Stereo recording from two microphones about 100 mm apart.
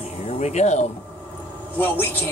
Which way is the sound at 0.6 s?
90° left.